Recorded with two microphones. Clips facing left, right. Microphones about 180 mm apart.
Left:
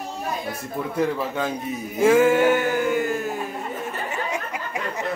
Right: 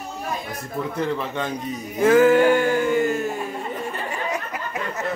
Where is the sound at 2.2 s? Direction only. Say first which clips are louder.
Right 2 dB; 5° left (ahead or behind).